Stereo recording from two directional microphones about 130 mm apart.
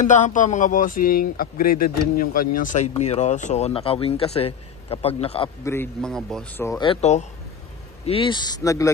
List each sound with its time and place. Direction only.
0.0 s speech: 70° left (ahead or behind)
2.9 s speech: 55° left (ahead or behind)
5.9 s speech: 5° left (ahead or behind)
7.0 s speech: 60° left (ahead or behind)
8.0 s speech: 45° left (ahead or behind); by 8.9 s 25° left (ahead or behind)